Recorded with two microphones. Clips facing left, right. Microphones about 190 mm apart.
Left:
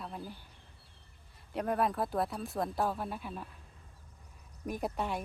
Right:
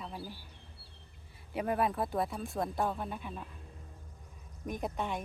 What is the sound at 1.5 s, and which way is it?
A woman's voice, 5° right (ahead or behind).